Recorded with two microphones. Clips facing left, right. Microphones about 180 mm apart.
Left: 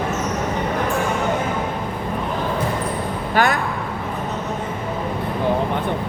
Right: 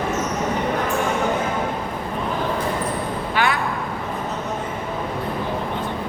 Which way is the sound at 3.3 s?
45° left (ahead or behind).